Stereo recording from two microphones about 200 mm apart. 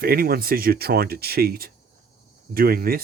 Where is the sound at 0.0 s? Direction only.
50° right (ahead or behind).